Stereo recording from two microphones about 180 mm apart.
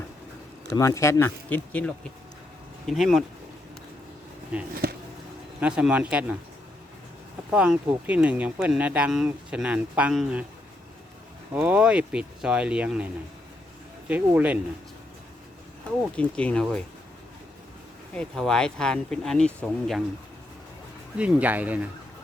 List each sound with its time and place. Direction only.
0.8 s speech: 15° left (ahead or behind); by 3.2 s centre (ahead or behind)
4.7 s speech: 60° right (ahead or behind)
5.5 s speech: 5° right (ahead or behind)
7.5 s speech: 5° right (ahead or behind)
11.5 s speech: 10° right (ahead or behind)
14.1 s speech: 10° right (ahead or behind)
16.1 s speech: 5° left (ahead or behind)
18.1 s speech: 5° left (ahead or behind)
21.2 s speech: 5° right (ahead or behind)